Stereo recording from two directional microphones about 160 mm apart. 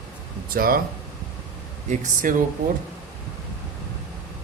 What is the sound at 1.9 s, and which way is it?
Speech, 50° right (ahead or behind).